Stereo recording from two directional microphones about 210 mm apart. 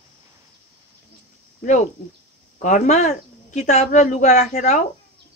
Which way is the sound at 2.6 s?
35° left (ahead or behind).